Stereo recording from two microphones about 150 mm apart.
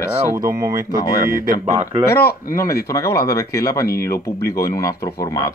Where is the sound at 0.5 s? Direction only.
25° right (ahead or behind).